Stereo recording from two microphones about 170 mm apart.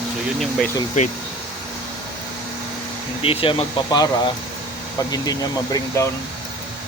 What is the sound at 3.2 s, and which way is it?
Speech, 30° left (ahead or behind).